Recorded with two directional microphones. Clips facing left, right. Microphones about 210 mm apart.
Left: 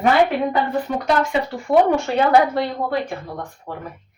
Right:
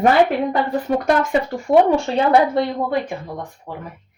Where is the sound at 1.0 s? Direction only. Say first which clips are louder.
Right 2 dB; 50° right (ahead or behind).